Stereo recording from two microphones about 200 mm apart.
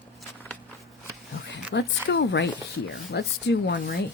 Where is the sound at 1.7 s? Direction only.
60° left (ahead or behind).